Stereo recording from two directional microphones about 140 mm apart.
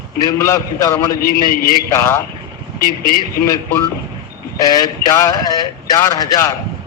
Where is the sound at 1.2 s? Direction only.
90° left.